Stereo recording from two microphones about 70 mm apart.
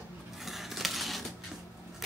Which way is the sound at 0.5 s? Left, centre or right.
Centre.